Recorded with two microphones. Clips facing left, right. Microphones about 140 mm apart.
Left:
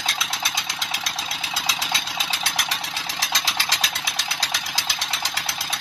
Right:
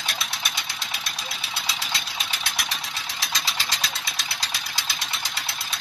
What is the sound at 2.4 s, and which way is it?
Engine, 90° left.